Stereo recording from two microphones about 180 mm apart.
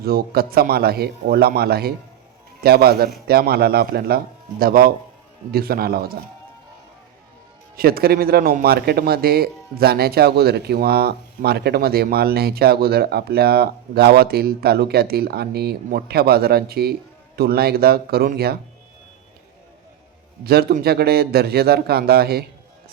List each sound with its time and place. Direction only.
0.0 s speech: 60° right (ahead or behind)
7.8 s speech: 55° right (ahead or behind)
20.4 s speech: 60° right (ahead or behind)